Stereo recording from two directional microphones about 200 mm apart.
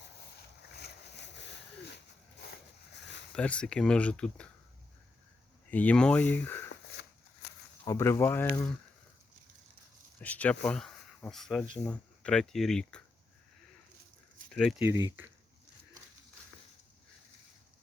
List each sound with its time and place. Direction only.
0.8 s a sound: 60° left (ahead or behind)
3.3 s speech: 5° left (ahead or behind)
5.7 s speech: 5° left (ahead or behind)
7.9 s speech: 15° left (ahead or behind)
10.2 s speech: 10° left (ahead or behind)
14.5 s speech: centre (ahead or behind)